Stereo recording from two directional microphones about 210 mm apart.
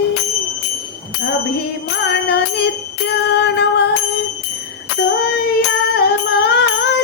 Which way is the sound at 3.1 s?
55° left (ahead or behind).